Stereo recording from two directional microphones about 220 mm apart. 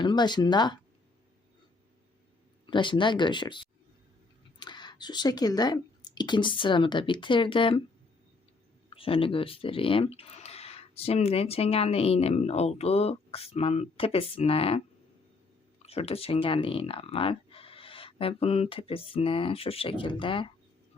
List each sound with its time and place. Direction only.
0.0 s speech: 20° left (ahead or behind)
2.6 s speech: 20° left (ahead or behind)
8.9 s speech: 25° left (ahead or behind)
15.8 s speech: 25° left (ahead or behind)